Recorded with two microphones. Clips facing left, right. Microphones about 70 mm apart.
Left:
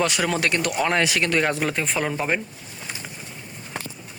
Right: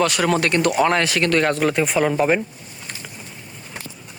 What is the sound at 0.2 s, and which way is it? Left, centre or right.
Speech, centre.